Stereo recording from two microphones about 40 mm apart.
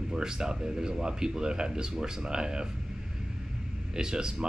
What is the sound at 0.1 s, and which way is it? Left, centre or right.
Speech, centre.